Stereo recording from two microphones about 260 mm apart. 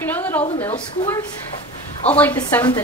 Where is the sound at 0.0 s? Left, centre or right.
Centre.